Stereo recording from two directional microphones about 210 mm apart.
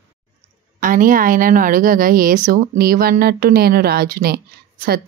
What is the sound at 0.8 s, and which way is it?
A woman's voice, 40° right (ahead or behind).